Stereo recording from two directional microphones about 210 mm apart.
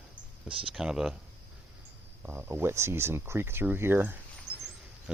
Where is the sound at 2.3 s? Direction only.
10° right (ahead or behind).